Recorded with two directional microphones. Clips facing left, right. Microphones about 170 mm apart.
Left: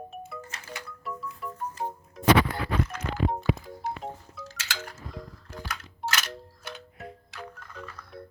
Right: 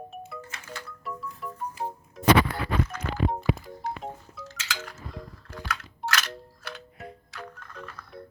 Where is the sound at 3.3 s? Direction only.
Centre (ahead or behind).